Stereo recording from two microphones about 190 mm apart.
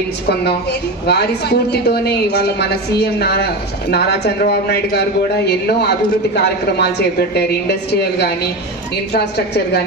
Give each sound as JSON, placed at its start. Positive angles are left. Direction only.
{"t": 0.3, "sound": "a woman's voice", "side_deg": 60}